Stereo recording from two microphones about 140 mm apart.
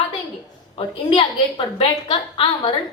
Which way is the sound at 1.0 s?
40° left (ahead or behind).